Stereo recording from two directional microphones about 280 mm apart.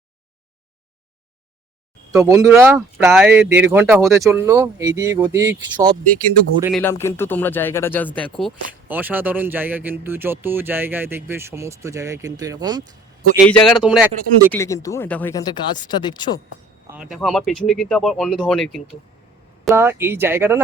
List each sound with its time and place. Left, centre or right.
2.1 s speech: centre
3.4 s speech: right
3.7 s speech: centre
6.6 s speech: centre
6.8 s speech: centre
13.3 s speech: centre
14.5 s speech: centre
16.8 s speech: centre
19.6 s speech: centre